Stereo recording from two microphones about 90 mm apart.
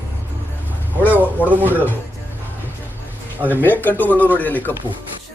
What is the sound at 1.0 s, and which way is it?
Speech, 20° right (ahead or behind).